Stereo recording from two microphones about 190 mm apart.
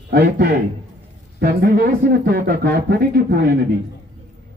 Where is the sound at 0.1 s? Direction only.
60° right (ahead or behind).